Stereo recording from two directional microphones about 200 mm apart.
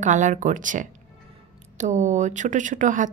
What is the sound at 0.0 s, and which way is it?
Speech, 40° right (ahead or behind).